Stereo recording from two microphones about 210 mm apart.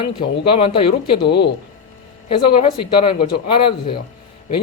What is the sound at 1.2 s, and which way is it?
Speech, 50° left (ahead or behind).